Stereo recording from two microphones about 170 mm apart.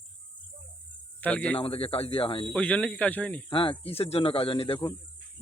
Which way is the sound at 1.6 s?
35° left (ahead or behind).